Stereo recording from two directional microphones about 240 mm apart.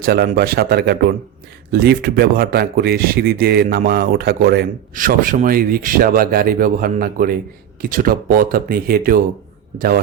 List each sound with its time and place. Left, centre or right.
0.0 s speech: right